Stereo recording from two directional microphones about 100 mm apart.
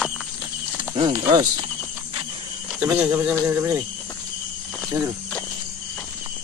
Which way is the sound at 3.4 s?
25° right (ahead or behind).